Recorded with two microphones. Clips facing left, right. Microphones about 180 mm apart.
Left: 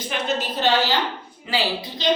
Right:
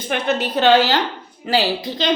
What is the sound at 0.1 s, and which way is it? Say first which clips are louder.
Speech: right 6 dB; 65° right (ahead or behind).